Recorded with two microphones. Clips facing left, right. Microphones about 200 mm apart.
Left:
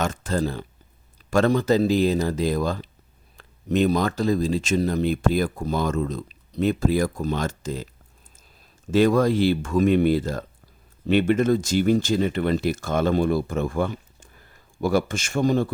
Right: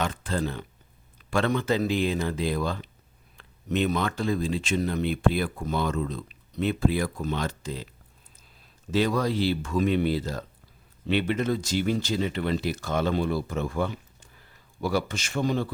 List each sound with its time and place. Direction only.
0.0 s speech: 45° left (ahead or behind)
8.9 s speech: 50° left (ahead or behind)